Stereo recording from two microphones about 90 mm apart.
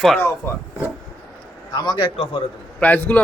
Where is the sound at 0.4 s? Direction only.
25° left (ahead or behind).